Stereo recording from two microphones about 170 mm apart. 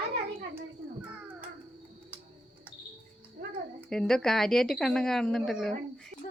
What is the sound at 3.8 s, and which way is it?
A woman's voice, 5° left (ahead or behind).